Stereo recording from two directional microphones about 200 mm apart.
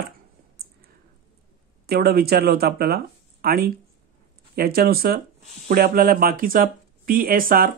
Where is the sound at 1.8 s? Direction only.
50° right (ahead or behind).